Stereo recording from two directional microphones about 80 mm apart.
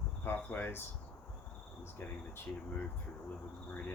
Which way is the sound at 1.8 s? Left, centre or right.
Left.